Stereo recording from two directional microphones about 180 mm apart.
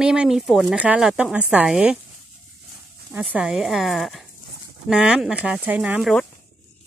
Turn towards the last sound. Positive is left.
turn(degrees=0)  # may be behind; listen again after turning